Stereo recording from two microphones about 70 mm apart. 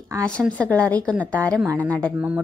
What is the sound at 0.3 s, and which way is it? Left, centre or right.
A woman's voice, centre.